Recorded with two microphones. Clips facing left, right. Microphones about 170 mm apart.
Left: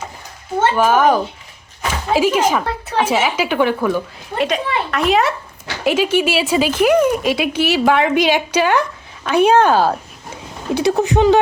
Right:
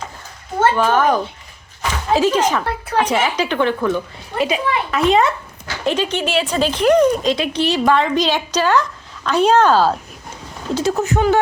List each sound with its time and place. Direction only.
0.6 s a woman's voice: 15° left (ahead or behind)